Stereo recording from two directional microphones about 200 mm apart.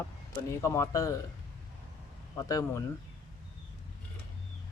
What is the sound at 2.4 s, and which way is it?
Speech, 15° left (ahead or behind).